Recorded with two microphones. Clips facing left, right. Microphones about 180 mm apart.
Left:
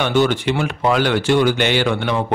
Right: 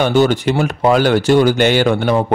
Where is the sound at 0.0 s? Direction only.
40° right (ahead or behind).